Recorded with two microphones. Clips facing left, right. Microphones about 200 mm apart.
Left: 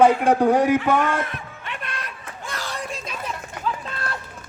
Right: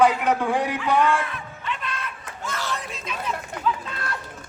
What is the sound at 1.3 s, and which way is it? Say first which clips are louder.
Music: right 2 dB; 60° left (ahead or behind).